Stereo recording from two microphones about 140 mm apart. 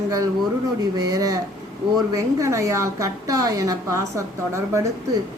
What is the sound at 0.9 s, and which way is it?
A woman's voice, 25° right (ahead or behind).